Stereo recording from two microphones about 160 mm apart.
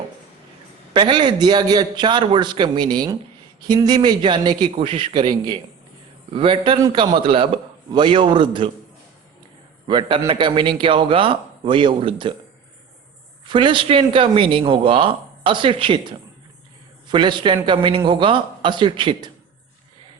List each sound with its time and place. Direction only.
0.9 s a man's voice: 30° right (ahead or behind)
9.8 s speech: 30° right (ahead or behind)
13.5 s speech: 30° right (ahead or behind)